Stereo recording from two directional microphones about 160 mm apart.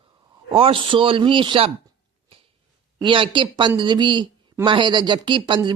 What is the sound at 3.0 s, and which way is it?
Speech, 30° right (ahead or behind).